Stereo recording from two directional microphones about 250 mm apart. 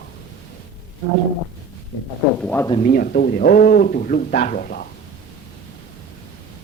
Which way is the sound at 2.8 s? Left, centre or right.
Left.